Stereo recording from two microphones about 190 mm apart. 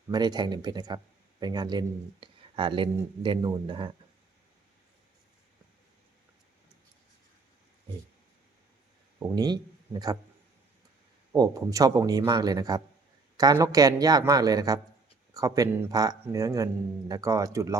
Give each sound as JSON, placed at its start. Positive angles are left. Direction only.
{"t": 0.1, "sound": "speech", "side_deg": -20}
{"t": 9.1, "sound": "speech", "side_deg": -20}
{"t": 11.3, "sound": "speech", "side_deg": -15}